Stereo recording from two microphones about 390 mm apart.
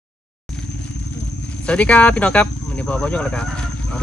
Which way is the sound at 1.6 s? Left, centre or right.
Centre.